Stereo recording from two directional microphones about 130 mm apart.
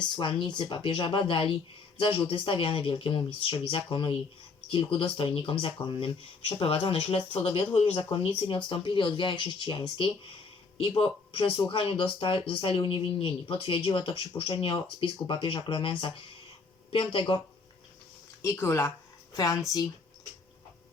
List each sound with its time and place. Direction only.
0.0 s speech: 40° left (ahead or behind)
18.4 s speech: 20° left (ahead or behind)